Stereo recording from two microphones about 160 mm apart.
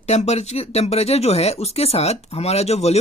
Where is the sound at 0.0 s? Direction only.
45° left (ahead or behind).